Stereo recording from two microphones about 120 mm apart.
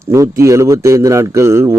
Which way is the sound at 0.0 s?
25° right (ahead or behind).